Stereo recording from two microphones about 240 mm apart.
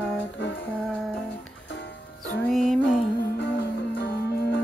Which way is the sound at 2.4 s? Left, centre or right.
Centre.